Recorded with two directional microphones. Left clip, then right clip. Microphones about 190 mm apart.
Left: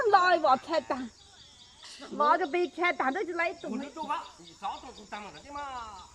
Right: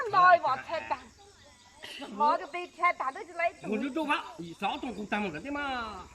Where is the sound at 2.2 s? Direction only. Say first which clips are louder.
Left 2 dB; 60° left (ahead or behind).